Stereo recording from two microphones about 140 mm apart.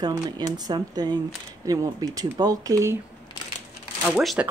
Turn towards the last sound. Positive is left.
turn(degrees=-15)  # may be behind; listen again after turning